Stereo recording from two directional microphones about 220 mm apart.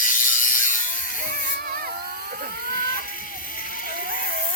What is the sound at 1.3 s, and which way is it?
Music, 40° right (ahead or behind).